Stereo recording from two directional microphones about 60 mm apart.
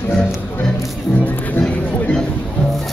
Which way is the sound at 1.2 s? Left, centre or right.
Left.